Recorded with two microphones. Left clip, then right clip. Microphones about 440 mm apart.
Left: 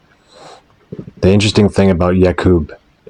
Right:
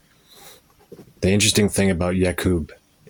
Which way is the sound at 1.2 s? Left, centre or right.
Right.